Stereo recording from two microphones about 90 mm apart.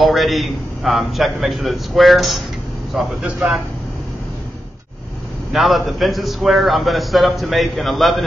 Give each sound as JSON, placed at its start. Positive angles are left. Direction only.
{"t": 0.0, "sound": "a man's voice", "side_deg": 0}
{"t": 5.5, "sound": "a man's voice", "side_deg": 0}